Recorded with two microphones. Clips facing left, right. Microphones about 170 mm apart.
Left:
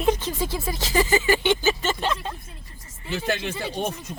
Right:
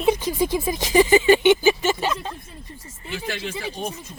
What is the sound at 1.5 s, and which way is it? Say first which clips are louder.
Speech: right 5 dB; 10° right (ahead or behind).